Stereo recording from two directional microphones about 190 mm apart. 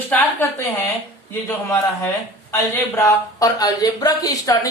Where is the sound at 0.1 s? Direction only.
10° left (ahead or behind).